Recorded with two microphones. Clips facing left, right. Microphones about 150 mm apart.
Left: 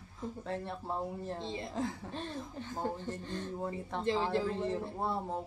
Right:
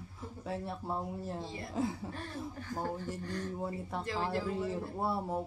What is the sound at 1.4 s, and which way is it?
Speech, 20° left (ahead or behind).